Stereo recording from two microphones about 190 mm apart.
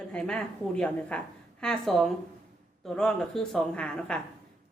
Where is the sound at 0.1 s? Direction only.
5° left (ahead or behind).